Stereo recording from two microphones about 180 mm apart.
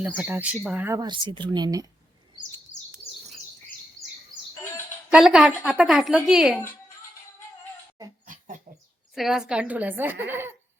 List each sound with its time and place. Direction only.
0.2 s speech: 10° right (ahead or behind)
5.0 s a woman's voice: 5° right (ahead or behind)
9.1 s a woman's voice: centre (ahead or behind)